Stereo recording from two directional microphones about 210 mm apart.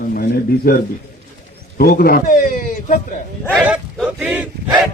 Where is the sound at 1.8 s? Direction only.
45° left (ahead or behind).